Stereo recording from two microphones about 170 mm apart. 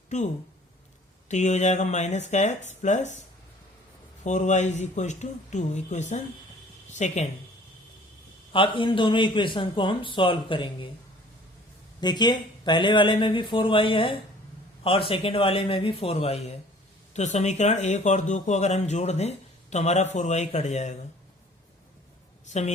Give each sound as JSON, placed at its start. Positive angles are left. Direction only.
{"t": 1.3, "sound": "speech", "side_deg": 45}
{"t": 4.2, "sound": "speech", "side_deg": 45}
{"t": 8.5, "sound": "a man's voice", "side_deg": 30}
{"t": 11.9, "sound": "a man's voice", "side_deg": 25}
{"t": 22.4, "sound": "a woman's voice", "side_deg": 45}